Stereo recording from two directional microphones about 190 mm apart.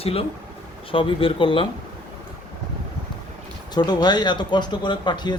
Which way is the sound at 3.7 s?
20° left (ahead or behind).